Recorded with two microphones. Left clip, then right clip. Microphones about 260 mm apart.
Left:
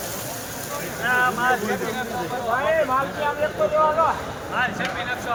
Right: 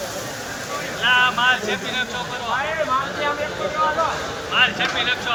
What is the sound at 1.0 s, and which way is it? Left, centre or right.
Speech, centre.